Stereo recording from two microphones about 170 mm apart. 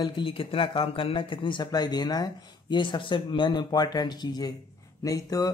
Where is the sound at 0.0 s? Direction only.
30° left (ahead or behind).